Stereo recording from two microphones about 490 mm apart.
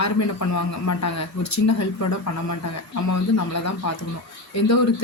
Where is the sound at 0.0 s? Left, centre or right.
Left.